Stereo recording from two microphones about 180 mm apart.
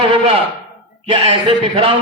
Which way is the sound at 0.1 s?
30° right (ahead or behind).